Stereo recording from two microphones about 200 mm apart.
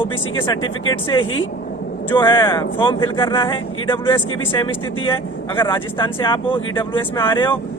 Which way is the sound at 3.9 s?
10° left (ahead or behind).